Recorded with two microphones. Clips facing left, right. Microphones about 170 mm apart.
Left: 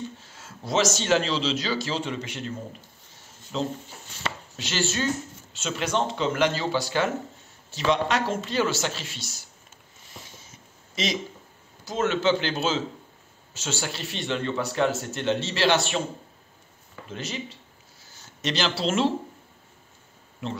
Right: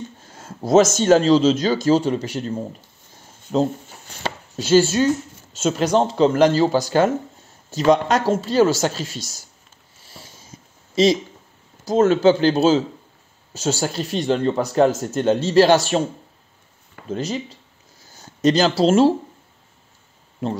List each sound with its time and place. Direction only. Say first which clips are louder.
0.2 s speech: right 10 dB; 45° right (ahead or behind)
4.1 s chopping: right 5 dB; 40° right (ahead or behind)
5.5 s speech: right 9 dB; 45° right (ahead or behind)
11.8 s speech: right 9 dB; 35° right (ahead or behind)
17.1 s speech: right 9 dB; 40° right (ahead or behind)